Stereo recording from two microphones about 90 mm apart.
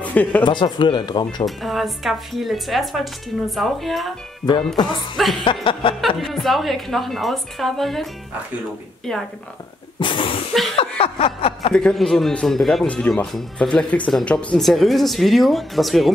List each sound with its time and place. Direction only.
0.0 s a sound: 15° left (ahead or behind)
0.4 s speech: 60° left (ahead or behind)
1.4 s speech: centre (ahead or behind)
5.1 s speech: centre (ahead or behind)
5.4 s music: 70° left (ahead or behind)
5.9 s speech: centre (ahead or behind)
9.9 s a sound: 70° left (ahead or behind)
10.8 s chuckle: 90° left
11.7 s speech: 5° left (ahead or behind)
12.8 s speech: 15° left (ahead or behind)
14.6 s speech: centre (ahead or behind)